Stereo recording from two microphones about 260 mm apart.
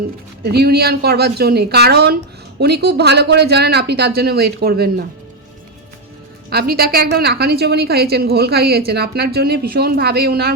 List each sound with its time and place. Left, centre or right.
0.4 s a woman's voice: right
6.5 s a woman's voice: right